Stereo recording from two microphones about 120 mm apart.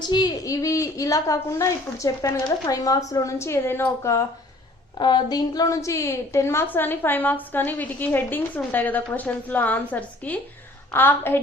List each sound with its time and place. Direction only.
0.0 s a woman's voice: 35° left (ahead or behind)
4.9 s a woman's voice: 40° left (ahead or behind); by 11.3 s 15° left (ahead or behind)